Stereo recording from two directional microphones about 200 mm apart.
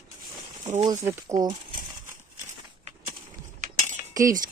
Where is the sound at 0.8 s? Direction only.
15° right (ahead or behind).